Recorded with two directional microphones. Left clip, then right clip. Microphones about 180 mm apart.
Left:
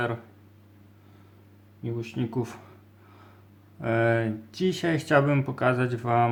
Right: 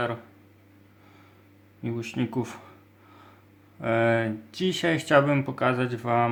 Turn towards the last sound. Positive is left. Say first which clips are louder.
# even
turn(degrees=0)  # may be behind; listen again after turning